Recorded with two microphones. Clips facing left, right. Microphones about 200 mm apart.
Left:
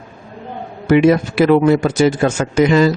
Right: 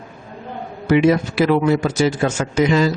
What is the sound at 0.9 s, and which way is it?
A man's voice, 55° left (ahead or behind).